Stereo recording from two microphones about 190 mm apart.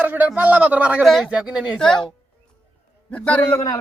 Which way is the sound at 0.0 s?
10° right (ahead or behind).